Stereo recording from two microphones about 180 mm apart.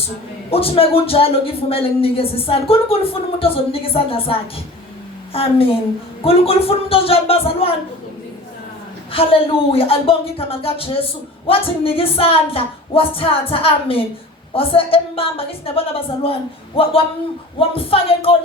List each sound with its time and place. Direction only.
0.5 s a woman's voice: 30° left (ahead or behind)
9.1 s a woman's voice: 30° left (ahead or behind)